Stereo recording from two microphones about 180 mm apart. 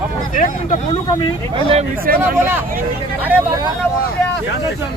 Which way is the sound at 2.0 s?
55° right (ahead or behind).